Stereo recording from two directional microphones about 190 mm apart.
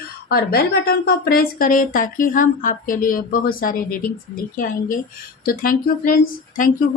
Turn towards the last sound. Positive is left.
turn(degrees=45)  # may be behind; listen again after turning